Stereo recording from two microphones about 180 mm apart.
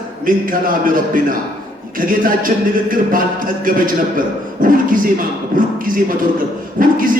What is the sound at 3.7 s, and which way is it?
A man's voice, 50° right (ahead or behind).